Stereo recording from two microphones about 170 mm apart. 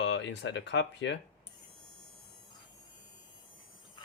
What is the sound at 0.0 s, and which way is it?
Speech, 90° left.